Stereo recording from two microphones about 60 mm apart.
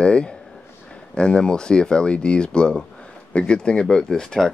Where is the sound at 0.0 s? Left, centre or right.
Centre.